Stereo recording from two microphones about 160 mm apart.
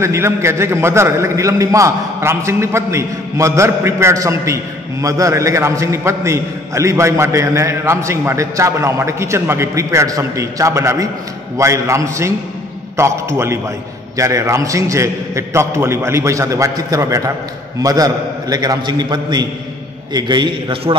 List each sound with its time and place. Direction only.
0.0 s a man's voice: 15° right (ahead or behind); by 20.9 s 35° right (ahead or behind)